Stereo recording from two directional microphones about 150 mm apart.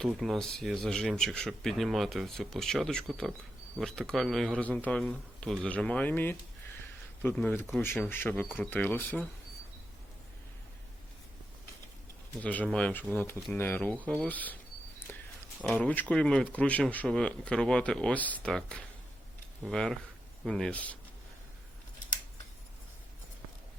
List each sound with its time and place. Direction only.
0.0 s speech: centre (ahead or behind)
12.4 s speech: 10° left (ahead or behind)
15.7 s speech: 10° left (ahead or behind)